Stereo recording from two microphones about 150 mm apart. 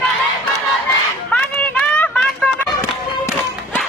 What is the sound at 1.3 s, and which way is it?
Run, 10° left (ahead or behind).